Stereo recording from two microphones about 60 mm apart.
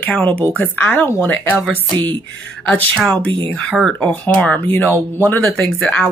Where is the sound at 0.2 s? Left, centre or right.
Left.